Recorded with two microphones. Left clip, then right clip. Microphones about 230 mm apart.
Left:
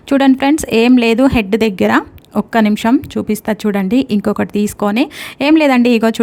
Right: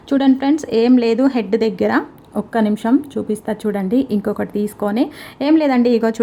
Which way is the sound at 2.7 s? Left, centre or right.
Left.